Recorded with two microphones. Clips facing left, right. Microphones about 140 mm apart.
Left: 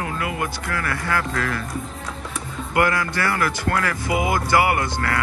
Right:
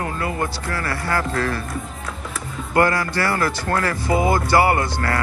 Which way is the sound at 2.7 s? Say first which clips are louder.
Right 2 dB; 30° right (ahead or behind).